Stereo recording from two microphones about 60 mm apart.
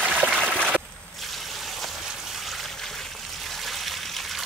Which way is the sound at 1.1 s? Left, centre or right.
Centre.